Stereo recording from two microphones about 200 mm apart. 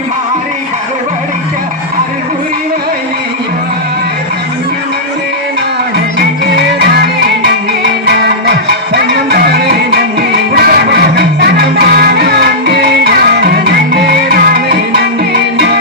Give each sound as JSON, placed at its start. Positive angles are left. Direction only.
{"t": 6.1, "sound": "music", "side_deg": -55}
{"t": 8.0, "sound": "music", "side_deg": -55}